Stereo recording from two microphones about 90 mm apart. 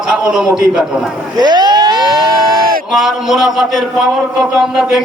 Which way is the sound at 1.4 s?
55° right (ahead or behind).